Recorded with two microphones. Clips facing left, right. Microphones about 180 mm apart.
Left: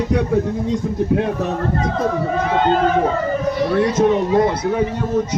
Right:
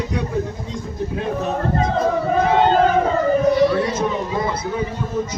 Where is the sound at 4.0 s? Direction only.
70° left (ahead or behind).